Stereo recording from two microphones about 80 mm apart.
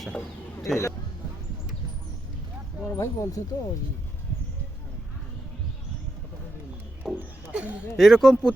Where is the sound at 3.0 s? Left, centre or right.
Left.